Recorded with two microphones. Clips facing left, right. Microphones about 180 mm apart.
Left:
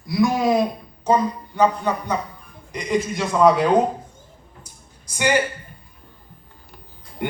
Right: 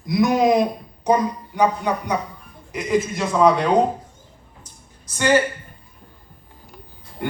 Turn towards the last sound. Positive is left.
turn(degrees=20)  # may be behind; listen again after turning